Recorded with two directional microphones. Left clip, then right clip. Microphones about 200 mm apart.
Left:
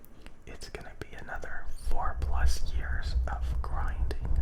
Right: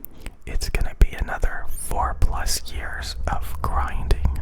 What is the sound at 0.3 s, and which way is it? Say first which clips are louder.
Whispering: right 13 dB; 25° right (ahead or behind).